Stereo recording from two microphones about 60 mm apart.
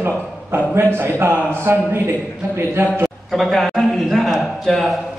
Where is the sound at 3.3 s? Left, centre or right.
Centre.